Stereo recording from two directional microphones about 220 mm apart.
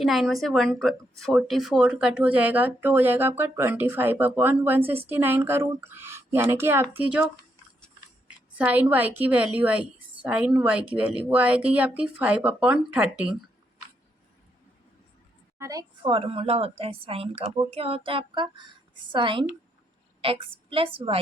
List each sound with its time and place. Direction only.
0.0 s speech: centre (ahead or behind)
8.5 s speech: 5° right (ahead or behind)
15.5 s a woman's voice: 15° right (ahead or behind)